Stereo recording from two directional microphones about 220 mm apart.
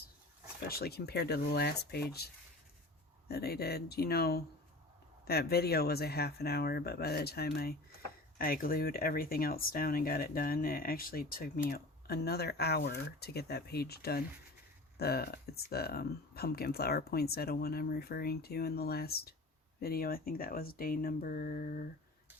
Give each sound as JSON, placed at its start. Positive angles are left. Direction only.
{"t": 0.7, "sound": "speech", "side_deg": 45}